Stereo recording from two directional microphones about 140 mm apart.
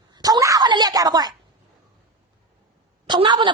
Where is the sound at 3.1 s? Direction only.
35° right (ahead or behind).